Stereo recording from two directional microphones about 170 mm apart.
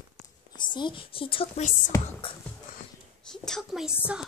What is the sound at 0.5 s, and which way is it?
Speech, 25° left (ahead or behind).